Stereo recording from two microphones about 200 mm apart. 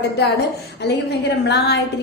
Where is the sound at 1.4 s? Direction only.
55° left (ahead or behind).